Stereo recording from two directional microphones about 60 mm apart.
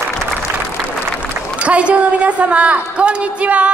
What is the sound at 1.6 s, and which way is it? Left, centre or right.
A woman's voice, right.